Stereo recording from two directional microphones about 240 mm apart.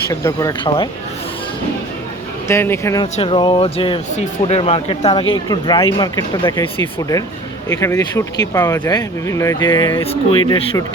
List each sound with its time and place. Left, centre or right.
0.1 s speech: centre
2.5 s speech: centre
7.7 s speech: centre